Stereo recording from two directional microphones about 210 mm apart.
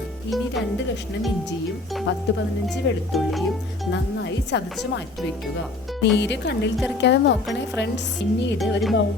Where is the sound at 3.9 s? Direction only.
55° left (ahead or behind).